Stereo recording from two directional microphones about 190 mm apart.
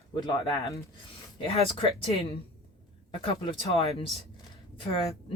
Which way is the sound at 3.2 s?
30° left (ahead or behind).